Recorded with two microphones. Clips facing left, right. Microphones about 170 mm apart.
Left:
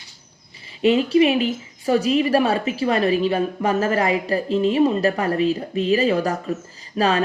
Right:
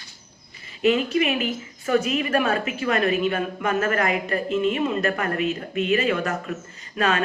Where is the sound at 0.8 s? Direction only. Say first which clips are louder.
Left 5 dB; 30° left (ahead or behind).